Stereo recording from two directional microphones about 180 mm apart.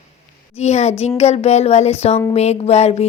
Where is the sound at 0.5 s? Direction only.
35° left (ahead or behind).